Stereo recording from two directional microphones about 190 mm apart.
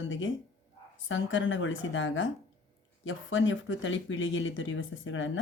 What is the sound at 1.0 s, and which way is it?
Speech, 90° left.